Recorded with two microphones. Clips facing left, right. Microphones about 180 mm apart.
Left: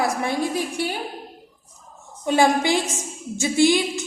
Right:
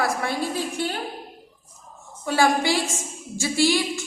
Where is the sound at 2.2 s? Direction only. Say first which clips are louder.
Left 2 dB; 20° left (ahead or behind).